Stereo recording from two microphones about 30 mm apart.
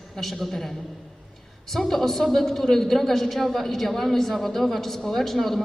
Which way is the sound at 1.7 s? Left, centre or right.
Centre.